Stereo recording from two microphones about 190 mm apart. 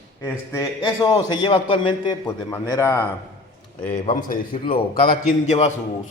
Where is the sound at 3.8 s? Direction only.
35° left (ahead or behind).